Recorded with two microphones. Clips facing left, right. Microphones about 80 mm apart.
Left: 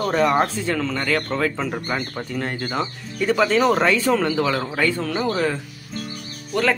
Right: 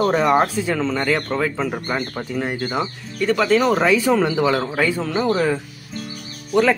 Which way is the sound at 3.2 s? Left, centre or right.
Centre.